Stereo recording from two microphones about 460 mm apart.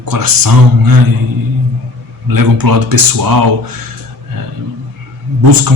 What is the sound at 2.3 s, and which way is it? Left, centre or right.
Speech, right.